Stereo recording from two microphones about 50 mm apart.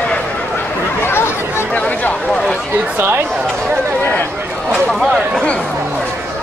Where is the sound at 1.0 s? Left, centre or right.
Left.